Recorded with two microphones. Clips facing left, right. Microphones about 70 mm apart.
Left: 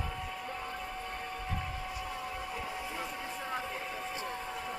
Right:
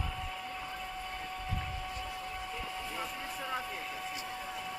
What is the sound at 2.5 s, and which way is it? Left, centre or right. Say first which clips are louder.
Vehicle: left 1 dB; centre.